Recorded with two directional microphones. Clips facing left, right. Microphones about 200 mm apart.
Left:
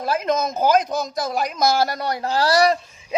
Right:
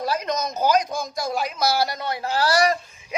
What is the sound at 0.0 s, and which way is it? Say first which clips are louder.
A man's voice: left 4 dB; 50° left (ahead or behind).